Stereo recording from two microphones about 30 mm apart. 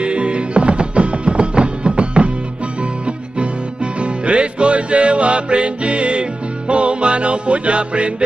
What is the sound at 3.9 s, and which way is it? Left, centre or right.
Music, right.